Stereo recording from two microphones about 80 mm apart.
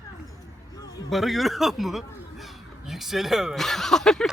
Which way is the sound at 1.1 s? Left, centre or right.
Centre.